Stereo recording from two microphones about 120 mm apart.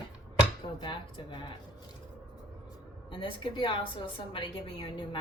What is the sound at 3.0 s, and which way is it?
Speech, 45° left (ahead or behind).